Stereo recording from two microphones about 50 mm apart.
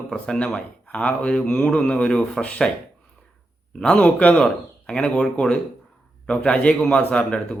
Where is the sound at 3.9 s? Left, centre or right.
Left.